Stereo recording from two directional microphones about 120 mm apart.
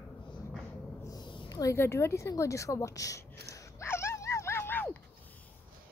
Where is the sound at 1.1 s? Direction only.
40° left (ahead or behind).